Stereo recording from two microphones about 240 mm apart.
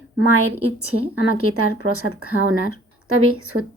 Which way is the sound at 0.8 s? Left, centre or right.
Right.